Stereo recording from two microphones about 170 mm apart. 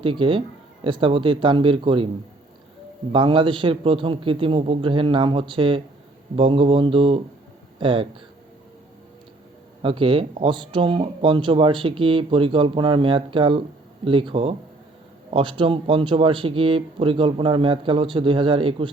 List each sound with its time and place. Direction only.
0.0 s speech: 30° right (ahead or behind)
3.1 s speech: 30° right (ahead or behind)
9.8 s speech: 30° right (ahead or behind)